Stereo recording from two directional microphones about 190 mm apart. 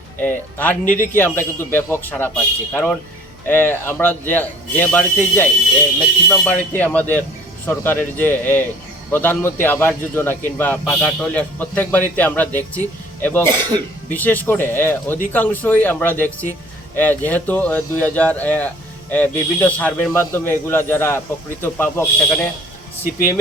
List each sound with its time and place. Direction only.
0.2 s a man's voice: 10° left (ahead or behind)